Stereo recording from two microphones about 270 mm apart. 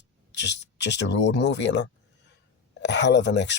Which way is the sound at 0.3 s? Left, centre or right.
Left.